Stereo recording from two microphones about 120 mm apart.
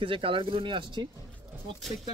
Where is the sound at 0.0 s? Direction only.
45° right (ahead or behind).